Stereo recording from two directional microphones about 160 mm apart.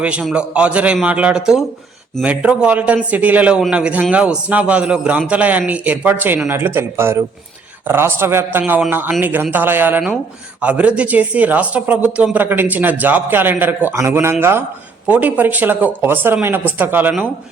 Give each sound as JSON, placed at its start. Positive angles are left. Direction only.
{"t": 0.0, "sound": "speech", "side_deg": -5}